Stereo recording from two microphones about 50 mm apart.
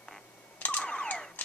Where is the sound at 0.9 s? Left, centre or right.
Centre.